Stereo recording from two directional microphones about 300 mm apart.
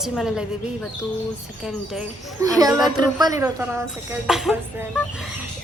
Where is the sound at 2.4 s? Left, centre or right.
Centre.